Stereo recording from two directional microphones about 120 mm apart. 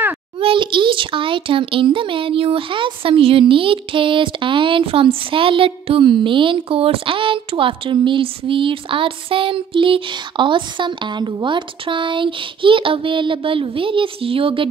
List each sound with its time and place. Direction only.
0.4 s a child's voice: 45° right (ahead or behind)